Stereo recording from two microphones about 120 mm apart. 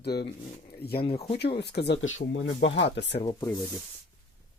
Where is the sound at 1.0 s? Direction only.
50° left (ahead or behind).